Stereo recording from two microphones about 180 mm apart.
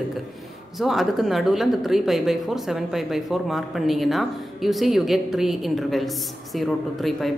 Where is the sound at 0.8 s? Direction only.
Centre (ahead or behind).